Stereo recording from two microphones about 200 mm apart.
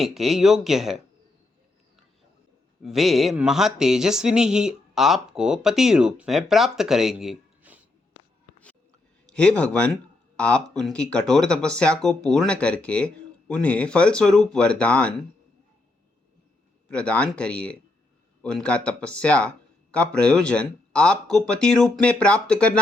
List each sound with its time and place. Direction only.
0.0 s speech: centre (ahead or behind)
2.8 s speech: centre (ahead or behind)
9.2 s speech: 5° left (ahead or behind)
16.9 s speech: 5° left (ahead or behind)